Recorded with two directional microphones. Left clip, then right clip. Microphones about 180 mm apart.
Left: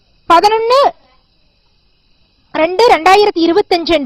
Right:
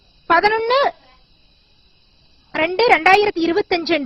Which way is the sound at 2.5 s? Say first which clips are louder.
Left 6 dB; 25° left (ahead or behind).